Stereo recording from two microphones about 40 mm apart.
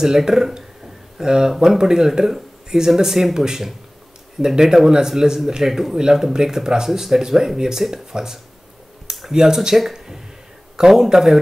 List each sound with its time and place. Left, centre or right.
0.0 s speech: centre